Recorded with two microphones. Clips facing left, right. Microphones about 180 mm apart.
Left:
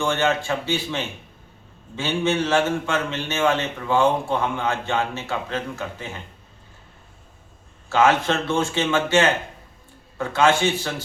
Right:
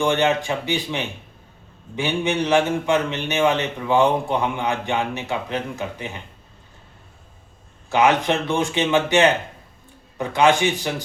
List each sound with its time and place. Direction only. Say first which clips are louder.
0.0 s a man's voice: right 3 dB; 15° right (ahead or behind)
7.9 s a man's voice: right 1 dB; 15° right (ahead or behind)